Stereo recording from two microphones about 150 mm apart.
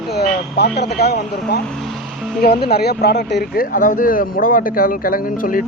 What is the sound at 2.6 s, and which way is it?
Speech, 90° left.